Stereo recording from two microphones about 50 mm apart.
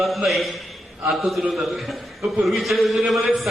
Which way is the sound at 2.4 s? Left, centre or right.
Centre.